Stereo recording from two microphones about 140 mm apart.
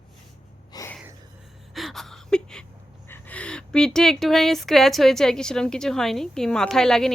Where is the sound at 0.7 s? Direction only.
25° left (ahead or behind).